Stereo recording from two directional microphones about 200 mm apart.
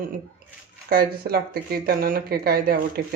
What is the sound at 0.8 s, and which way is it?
A woman's voice, 50° right (ahead or behind).